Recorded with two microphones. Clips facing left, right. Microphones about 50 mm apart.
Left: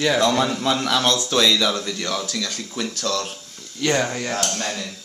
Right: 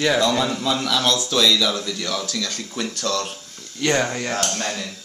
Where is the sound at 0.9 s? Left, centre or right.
Left.